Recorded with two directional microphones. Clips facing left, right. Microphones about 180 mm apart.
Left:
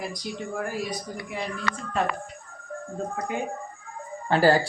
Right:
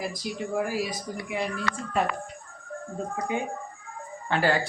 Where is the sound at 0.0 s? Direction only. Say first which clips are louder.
Right 1 dB; 5° right (ahead or behind).